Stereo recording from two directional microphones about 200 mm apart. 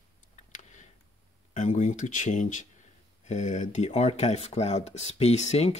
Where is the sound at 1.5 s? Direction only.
35° left (ahead or behind).